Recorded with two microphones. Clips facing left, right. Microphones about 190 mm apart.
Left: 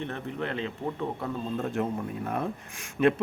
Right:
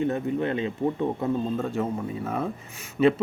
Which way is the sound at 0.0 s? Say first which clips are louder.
Right 8 dB; 10° right (ahead or behind).